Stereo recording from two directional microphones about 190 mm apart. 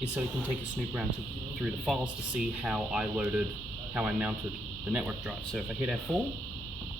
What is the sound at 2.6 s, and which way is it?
Speech, 5° right (ahead or behind).